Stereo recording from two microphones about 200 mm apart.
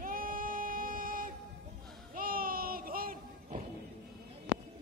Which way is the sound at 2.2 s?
45° right (ahead or behind).